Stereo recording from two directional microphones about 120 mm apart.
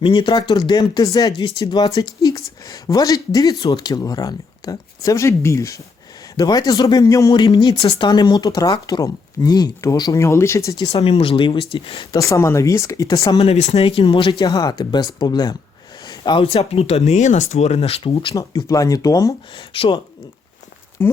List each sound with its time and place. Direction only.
0.0 s speech: 40° left (ahead or behind)
7.9 s speech: 40° left (ahead or behind); by 10.8 s 25° left (ahead or behind)
10.9 s speech: 50° left (ahead or behind)
12.1 s speech: 25° left (ahead or behind)
13.4 s speech: 60° left (ahead or behind)
14.4 s speech: 30° left (ahead or behind)
18.3 s speech: 30° left (ahead or behind)
19.5 s speech: 45° left (ahead or behind)
21.0 s speech: 20° left (ahead or behind)